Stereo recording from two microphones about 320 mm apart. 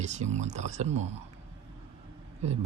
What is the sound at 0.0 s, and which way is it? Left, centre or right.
Speech, right.